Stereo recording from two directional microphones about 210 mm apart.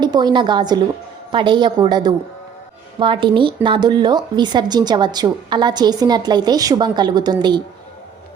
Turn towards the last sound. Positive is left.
turn(degrees=-20)  # may be behind; listen again after turning